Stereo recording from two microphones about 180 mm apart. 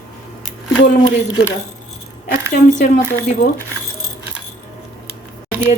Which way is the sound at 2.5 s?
45° left (ahead or behind).